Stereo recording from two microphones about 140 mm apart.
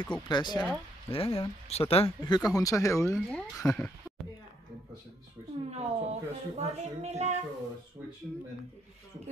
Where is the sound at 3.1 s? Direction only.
5° left (ahead or behind).